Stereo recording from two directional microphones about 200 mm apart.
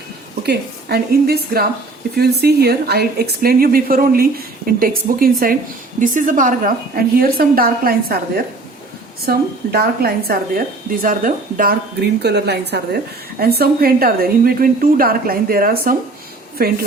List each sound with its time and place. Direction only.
0.4 s a woman's voice: 55° right (ahead or behind)
9.2 s a woman's voice: 50° right (ahead or behind)